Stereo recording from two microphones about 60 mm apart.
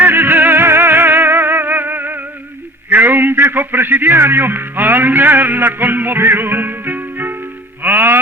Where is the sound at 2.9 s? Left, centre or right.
Right.